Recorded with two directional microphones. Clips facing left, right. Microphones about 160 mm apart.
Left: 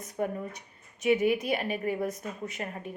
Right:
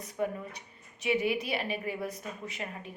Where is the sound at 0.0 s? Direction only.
45° left (ahead or behind).